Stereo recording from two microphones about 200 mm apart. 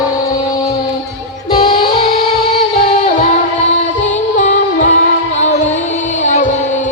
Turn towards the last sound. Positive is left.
turn(degrees=35)  # may be behind; listen again after turning